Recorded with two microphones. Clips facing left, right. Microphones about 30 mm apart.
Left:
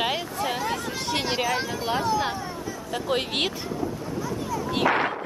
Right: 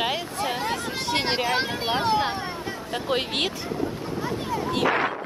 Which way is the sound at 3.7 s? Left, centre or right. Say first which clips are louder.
Right 1 dB; right.